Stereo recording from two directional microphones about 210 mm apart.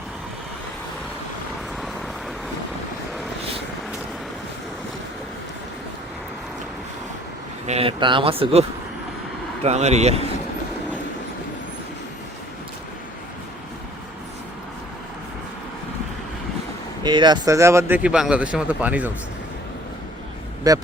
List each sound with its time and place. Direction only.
7.7 s speech: 25° right (ahead or behind)
9.6 s a man's voice: 30° right (ahead or behind)
17.0 s speech: 20° right (ahead or behind)
20.7 s speech: 15° right (ahead or behind)